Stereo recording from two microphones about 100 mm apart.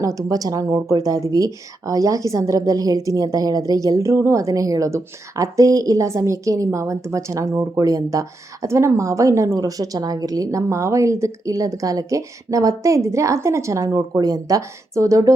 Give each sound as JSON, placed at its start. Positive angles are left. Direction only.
{"t": 0.0, "sound": "speech", "side_deg": -35}